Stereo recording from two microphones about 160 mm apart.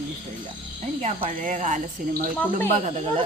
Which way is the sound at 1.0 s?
45° right (ahead or behind).